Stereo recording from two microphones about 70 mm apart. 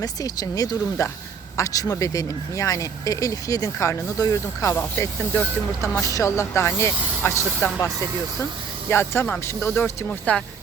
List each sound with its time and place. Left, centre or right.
0.0 s speech: left
1.0 s speech: left
4.8 s speech: left
6.0 s speech: left
8.9 s speech: left
10.1 s speech: centre